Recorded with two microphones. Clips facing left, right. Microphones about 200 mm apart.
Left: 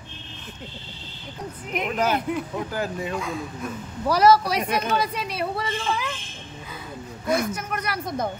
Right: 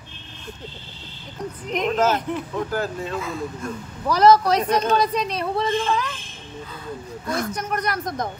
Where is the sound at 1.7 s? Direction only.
10° left (ahead or behind).